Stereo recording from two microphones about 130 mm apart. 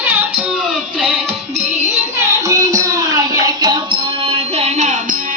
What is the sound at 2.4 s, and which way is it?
Music, 25° right (ahead or behind).